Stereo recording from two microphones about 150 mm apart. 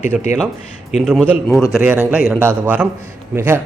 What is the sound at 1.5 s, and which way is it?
Speech, 20° left (ahead or behind).